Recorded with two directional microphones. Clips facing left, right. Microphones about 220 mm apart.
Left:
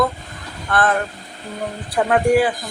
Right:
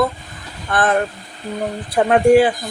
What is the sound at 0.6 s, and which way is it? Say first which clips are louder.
Speech: right 1 dB; 20° right (ahead or behind).